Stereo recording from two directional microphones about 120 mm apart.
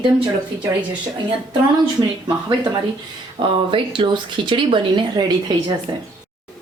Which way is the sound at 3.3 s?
50° right (ahead or behind).